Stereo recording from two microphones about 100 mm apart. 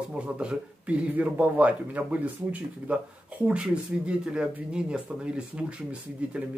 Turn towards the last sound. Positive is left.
turn(degrees=-10)  # may be behind; listen again after turning